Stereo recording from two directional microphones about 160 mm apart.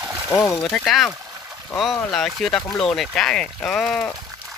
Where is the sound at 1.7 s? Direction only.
Centre (ahead or behind).